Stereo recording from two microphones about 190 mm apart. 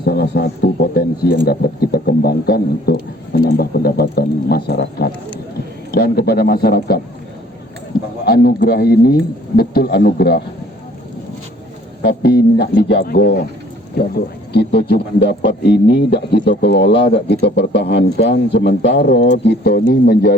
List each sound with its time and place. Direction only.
0.0 s speech: 55° left (ahead or behind)
8.2 s speech: 55° left (ahead or behind)
12.0 s speech: 55° left (ahead or behind)